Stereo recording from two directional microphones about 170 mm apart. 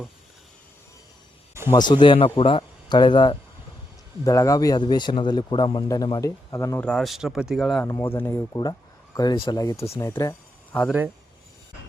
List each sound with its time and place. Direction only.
1.7 s a man's voice: 25° left (ahead or behind)
6.8 s speech: centre (ahead or behind)
7.9 s a man's voice: 15° left (ahead or behind)